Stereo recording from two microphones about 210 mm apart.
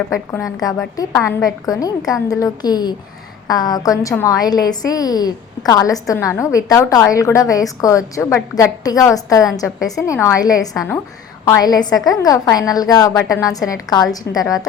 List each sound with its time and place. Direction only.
0.1 s a woman's voice: 15° left (ahead or behind)